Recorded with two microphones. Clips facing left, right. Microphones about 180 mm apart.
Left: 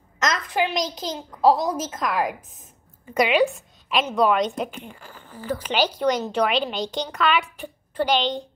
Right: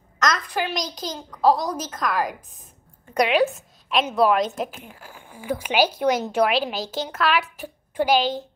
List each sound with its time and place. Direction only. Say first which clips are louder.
0.7 s a child's voice: left 2 dB; 25° left (ahead or behind)
1.9 s a woman's voice: even; 5° left (ahead or behind)